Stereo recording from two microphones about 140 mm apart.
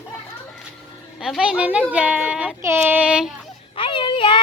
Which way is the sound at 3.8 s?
40° left (ahead or behind).